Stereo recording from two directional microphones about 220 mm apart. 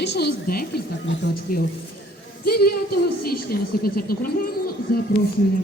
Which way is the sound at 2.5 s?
45° left (ahead or behind).